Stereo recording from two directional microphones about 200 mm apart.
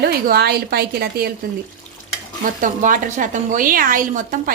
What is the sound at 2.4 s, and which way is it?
Speech, 40° right (ahead or behind).